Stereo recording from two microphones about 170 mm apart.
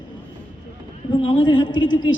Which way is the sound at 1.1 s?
30° left (ahead or behind).